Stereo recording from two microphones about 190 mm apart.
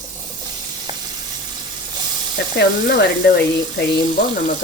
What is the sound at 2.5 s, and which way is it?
Speech, 60° left (ahead or behind).